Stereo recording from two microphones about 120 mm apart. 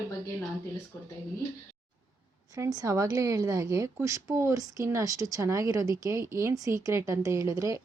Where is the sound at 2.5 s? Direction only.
30° right (ahead or behind).